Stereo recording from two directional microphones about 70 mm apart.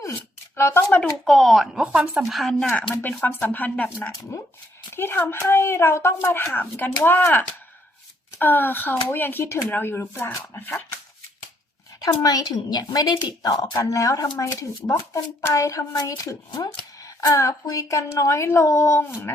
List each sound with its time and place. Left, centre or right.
0.5 s speech: left
1.1 s speech: centre
1.9 s speech: centre
2.3 s speech: centre
2.9 s speech: left
4.3 s speech: left
11.9 s speech: left
13.7 s speech: left